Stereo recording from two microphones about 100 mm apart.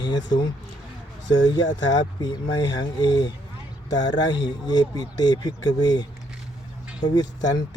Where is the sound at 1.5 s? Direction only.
45° left (ahead or behind).